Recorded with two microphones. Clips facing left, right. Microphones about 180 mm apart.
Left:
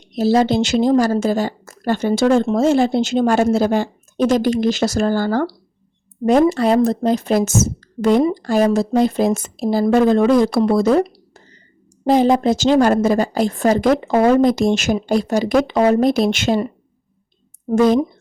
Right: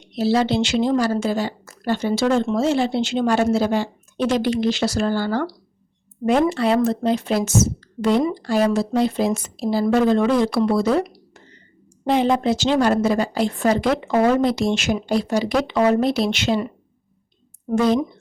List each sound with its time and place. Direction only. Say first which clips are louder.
0.1 s speech: left 4 dB; 45° left (ahead or behind)
11.0 s a sound: left 7 dB; 35° left (ahead or behind)
12.0 s a woman's voice: left 4 dB; 40° left (ahead or behind)